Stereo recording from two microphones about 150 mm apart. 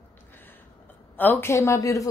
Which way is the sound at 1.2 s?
15° left (ahead or behind).